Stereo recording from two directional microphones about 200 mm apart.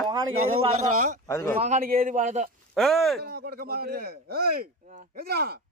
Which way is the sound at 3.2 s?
50° right (ahead or behind).